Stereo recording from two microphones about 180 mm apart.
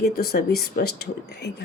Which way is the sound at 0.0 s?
55° left (ahead or behind).